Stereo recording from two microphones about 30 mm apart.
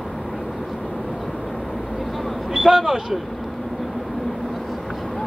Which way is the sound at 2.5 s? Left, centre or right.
Centre.